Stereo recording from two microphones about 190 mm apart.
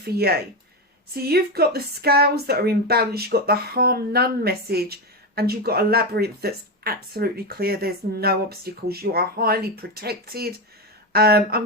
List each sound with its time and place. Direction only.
0.0 s speech: 55° right (ahead or behind)